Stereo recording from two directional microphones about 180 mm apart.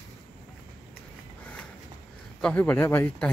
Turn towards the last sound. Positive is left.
turn(degrees=10)  # may be behind; listen again after turning